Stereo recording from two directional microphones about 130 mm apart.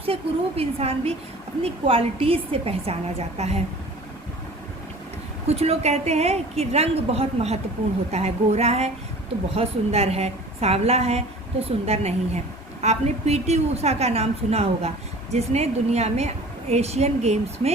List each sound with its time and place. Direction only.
0.0 s a woman's voice: 50° right (ahead or behind)
5.5 s a woman's voice: 50° right (ahead or behind)